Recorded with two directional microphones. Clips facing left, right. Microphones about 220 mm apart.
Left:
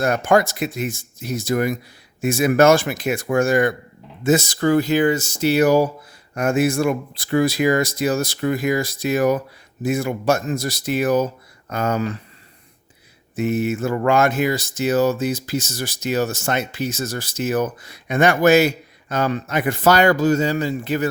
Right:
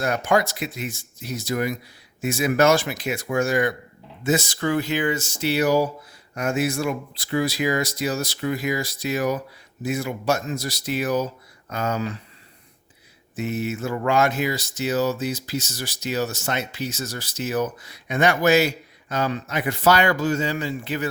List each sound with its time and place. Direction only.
0.0 s speech: 50° left (ahead or behind)
13.3 s speech: 50° left (ahead or behind)